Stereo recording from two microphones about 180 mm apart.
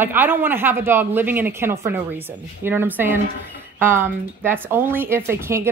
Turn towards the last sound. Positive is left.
turn(degrees=-15)  # may be behind; listen again after turning